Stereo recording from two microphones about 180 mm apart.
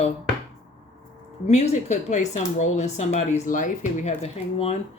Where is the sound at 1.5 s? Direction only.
40° left (ahead or behind).